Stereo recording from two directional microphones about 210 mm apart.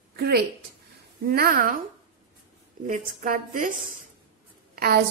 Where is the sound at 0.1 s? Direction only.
50° right (ahead or behind).